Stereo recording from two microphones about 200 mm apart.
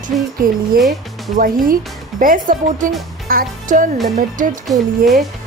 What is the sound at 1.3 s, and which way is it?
Speech, 45° right (ahead or behind).